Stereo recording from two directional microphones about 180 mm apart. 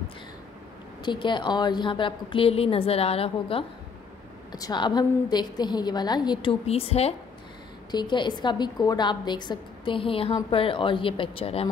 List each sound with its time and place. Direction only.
1.0 s a woman's voice: 25° left (ahead or behind)